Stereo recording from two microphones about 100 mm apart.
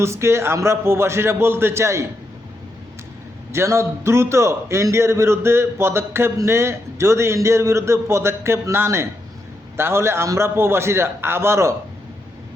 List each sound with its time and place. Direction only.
0.0 s a man's voice: 25° right (ahead or behind)
3.5 s a man's voice: 25° right (ahead or behind)